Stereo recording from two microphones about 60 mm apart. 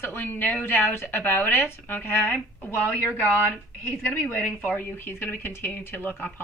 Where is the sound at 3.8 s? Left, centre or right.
Left.